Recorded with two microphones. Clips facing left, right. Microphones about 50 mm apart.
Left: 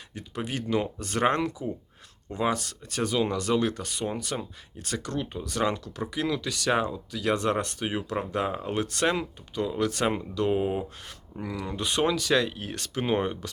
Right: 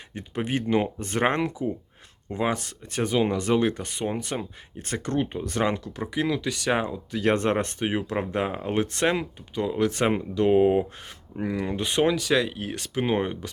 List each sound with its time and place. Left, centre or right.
0.1 s speech: right
7.1 s speech: right; by 13.5 s centre